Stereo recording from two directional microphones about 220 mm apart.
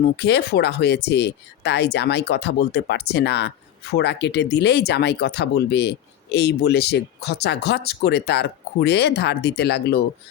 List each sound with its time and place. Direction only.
0.2 s speech: 50° left (ahead or behind)